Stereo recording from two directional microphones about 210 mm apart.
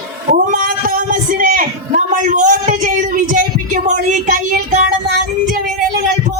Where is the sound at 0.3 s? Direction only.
40° right (ahead or behind).